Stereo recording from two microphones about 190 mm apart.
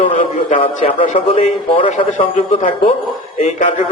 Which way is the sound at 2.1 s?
40° left (ahead or behind).